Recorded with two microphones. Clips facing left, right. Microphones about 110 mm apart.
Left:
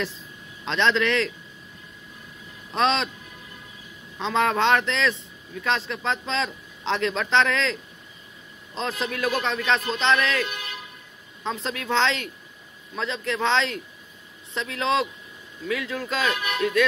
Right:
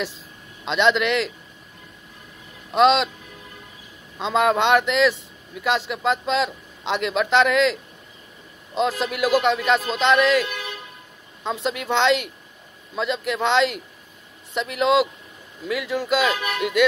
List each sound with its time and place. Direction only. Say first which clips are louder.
0.7 s speech: right 3 dB; 10° right (ahead or behind)
2.7 s speech: right 6 dB; 5° right (ahead or behind)
4.2 s speech: right 3 dB; 10° right (ahead or behind)
11.6 s speech: right 3 dB; 5° right (ahead or behind)